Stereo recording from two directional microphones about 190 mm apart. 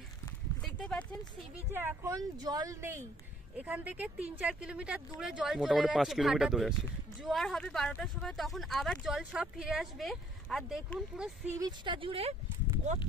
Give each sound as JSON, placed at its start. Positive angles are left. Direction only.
{"t": 0.7, "sound": "a sound", "side_deg": 5}
{"t": 1.7, "sound": "speech", "side_deg": -15}
{"t": 11.5, "sound": "speech", "side_deg": -20}